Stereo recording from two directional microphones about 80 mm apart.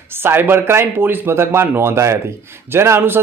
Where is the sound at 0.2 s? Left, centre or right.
Right.